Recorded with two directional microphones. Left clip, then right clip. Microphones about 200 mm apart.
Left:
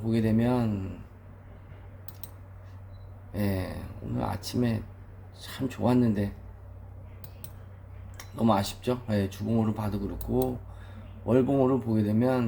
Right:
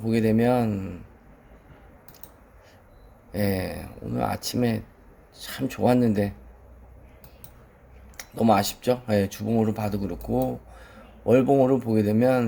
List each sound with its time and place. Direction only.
0.0 s speech: 55° right (ahead or behind)
3.3 s speech: 55° right (ahead or behind)
8.1 s speech: 55° right (ahead or behind)